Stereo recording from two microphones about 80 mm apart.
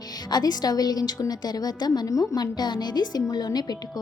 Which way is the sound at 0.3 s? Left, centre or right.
Left.